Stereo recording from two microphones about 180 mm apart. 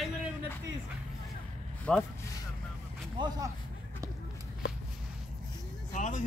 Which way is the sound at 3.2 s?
25° right (ahead or behind).